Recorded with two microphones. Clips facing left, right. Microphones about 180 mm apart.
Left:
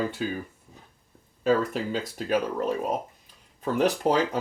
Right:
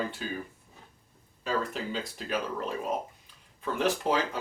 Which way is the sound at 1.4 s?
45° left (ahead or behind).